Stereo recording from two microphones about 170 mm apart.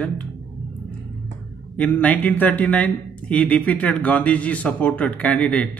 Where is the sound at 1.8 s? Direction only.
10° left (ahead or behind).